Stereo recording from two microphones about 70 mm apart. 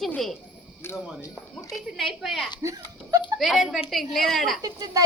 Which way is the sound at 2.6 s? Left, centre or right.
Right.